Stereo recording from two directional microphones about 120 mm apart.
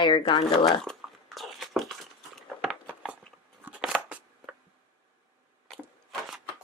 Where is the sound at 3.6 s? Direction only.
10° right (ahead or behind).